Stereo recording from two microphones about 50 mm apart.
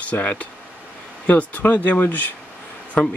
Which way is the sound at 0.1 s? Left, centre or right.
Left.